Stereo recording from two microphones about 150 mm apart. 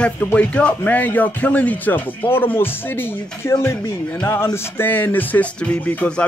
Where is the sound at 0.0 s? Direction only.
10° left (ahead or behind).